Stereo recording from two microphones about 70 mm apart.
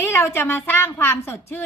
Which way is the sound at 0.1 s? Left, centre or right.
Left.